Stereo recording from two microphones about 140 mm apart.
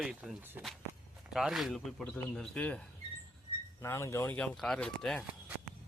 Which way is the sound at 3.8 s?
20° left (ahead or behind).